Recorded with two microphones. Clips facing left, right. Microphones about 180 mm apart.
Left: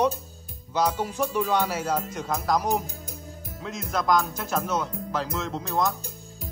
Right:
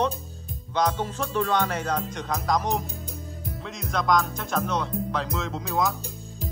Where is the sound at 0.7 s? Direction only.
5° left (ahead or behind).